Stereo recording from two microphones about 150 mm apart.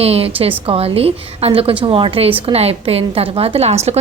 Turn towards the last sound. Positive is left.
turn(degrees=-45)  # may be behind; listen again after turning